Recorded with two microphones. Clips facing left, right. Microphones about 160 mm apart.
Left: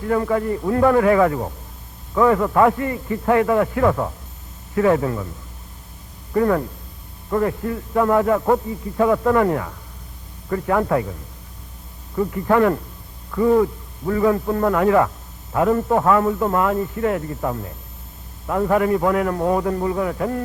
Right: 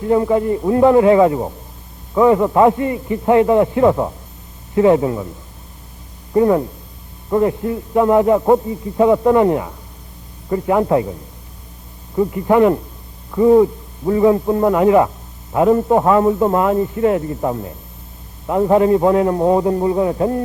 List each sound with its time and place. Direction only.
0.0 s a man's voice: 20° right (ahead or behind)
6.3 s a man's voice: 20° right (ahead or behind)
12.1 s a man's voice: 20° right (ahead or behind)